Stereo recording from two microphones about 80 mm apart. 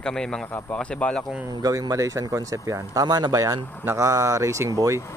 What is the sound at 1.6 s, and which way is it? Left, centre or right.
Speech, right.